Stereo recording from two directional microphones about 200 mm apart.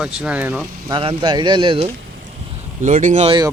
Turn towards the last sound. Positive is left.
turn(degrees=-20)  # may be behind; listen again after turning